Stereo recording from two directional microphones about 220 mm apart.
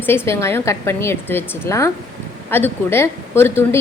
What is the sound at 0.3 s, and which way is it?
A woman's voice, 10° left (ahead or behind).